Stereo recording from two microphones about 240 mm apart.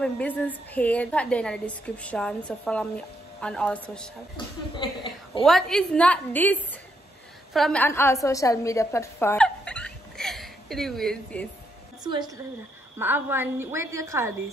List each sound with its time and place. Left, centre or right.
0.0 s a woman's voice: centre
4.4 s speech: centre
4.7 s a sound: centre
5.4 s a woman's voice: centre
12.0 s a woman's voice: centre